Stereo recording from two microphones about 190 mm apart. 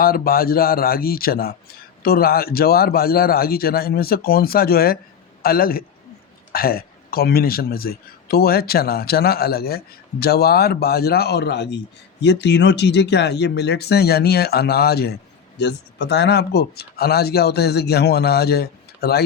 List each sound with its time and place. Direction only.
0.0 s a man's voice: 50° left (ahead or behind)